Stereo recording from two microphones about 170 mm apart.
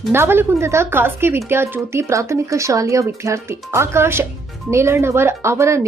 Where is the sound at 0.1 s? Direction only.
15° right (ahead or behind).